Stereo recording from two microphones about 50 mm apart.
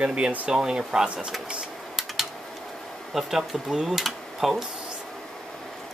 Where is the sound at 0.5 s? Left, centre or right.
Centre.